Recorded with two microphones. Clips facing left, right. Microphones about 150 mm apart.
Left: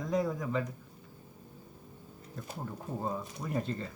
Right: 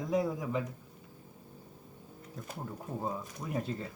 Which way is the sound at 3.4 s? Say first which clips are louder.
Left 1 dB; 10° right (ahead or behind).